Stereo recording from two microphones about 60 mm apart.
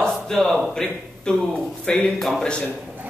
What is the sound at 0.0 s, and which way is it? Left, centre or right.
Speech, centre.